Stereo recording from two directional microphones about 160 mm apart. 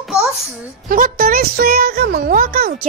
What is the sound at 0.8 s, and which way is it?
Music, 60° right (ahead or behind).